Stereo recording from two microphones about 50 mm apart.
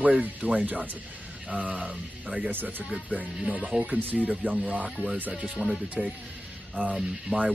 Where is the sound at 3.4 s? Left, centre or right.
Right.